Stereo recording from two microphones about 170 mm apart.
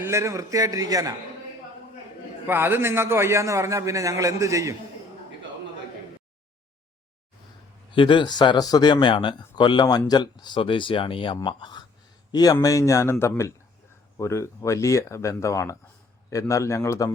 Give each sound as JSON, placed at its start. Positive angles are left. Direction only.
{"t": 0.0, "sound": "a man's voice", "side_deg": -15}
{"t": 2.5, "sound": "a man's voice", "side_deg": -10}
{"t": 7.9, "sound": "speech", "side_deg": 30}